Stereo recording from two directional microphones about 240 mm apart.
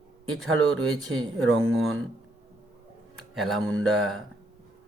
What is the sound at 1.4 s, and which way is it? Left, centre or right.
Speech, right.